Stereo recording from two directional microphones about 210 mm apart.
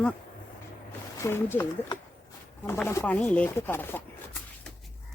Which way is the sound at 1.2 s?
10° left (ahead or behind).